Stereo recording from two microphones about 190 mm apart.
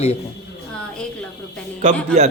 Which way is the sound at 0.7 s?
5° left (ahead or behind).